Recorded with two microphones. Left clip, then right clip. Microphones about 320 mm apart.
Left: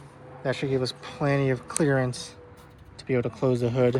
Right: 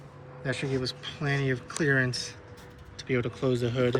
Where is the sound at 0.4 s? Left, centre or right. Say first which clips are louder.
Left 4 dB; centre.